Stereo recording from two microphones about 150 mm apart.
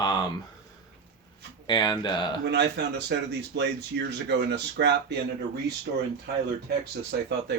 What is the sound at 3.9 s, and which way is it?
Speech, 90° right.